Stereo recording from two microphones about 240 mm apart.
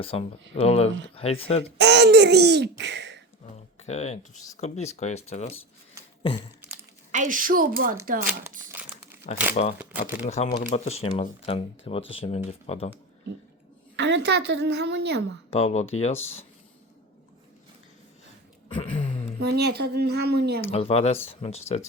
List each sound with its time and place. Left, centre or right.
0.0 s speech: left
1.8 s speech: right
3.8 s speech: left
7.1 s speech: right
9.2 s speech: left
13.9 s a woman's voice: right
15.4 s speech: left
18.7 s a sound: left
19.4 s speech: right
20.7 s speech: left